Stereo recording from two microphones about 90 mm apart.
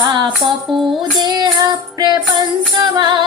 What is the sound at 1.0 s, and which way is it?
Child singing, 55° right (ahead or behind).